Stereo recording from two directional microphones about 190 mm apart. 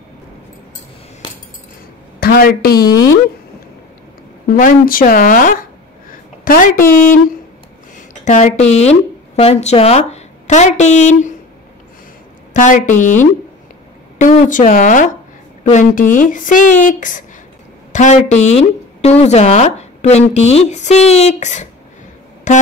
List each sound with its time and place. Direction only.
2.1 s a woman's voice: 50° left (ahead or behind)
4.6 s speech: 45° left (ahead or behind)
8.3 s speech: 40° left (ahead or behind)
12.5 s speech: 40° left (ahead or behind)